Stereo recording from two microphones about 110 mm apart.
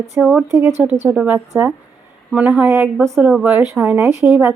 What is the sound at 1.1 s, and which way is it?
A woman's voice, 10° right (ahead or behind).